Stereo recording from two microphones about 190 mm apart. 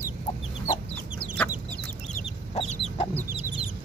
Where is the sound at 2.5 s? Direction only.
35° left (ahead or behind).